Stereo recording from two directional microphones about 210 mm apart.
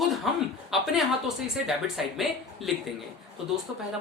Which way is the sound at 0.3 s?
Centre (ahead or behind).